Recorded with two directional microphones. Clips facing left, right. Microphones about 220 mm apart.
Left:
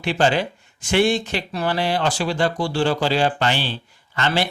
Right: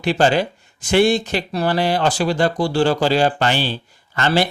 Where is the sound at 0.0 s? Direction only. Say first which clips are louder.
Right 3 dB; 40° right (ahead or behind).